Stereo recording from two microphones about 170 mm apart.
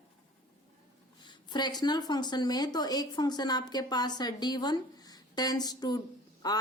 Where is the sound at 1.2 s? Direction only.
25° left (ahead or behind).